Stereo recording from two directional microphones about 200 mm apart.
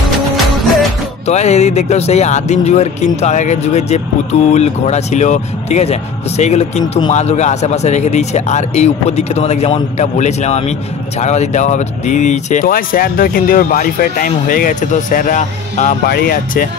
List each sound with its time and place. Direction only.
1.2 s speech: 35° left (ahead or behind)